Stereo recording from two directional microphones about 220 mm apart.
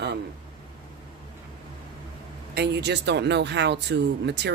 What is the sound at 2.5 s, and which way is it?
Speech, 50° right (ahead or behind).